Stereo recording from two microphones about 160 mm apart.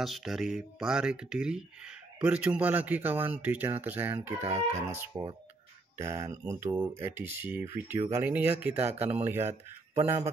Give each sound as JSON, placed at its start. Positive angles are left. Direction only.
{"t": 0.0, "sound": "speech", "side_deg": 0}